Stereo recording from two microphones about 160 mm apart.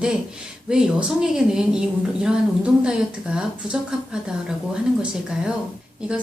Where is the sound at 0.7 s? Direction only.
5° right (ahead or behind).